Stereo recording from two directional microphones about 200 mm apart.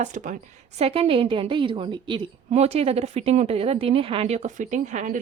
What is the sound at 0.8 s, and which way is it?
A woman's voice, 30° right (ahead or behind).